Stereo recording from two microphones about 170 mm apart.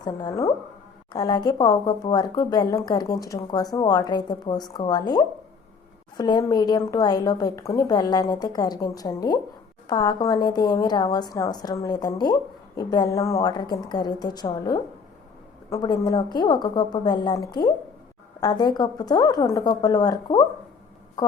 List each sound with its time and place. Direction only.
0.0 s speech: 25° left (ahead or behind)